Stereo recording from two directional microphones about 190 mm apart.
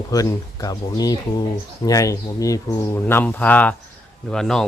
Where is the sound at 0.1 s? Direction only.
20° left (ahead or behind).